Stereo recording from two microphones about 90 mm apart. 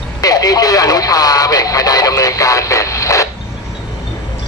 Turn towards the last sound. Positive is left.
turn(degrees=35)  # may be behind; listen again after turning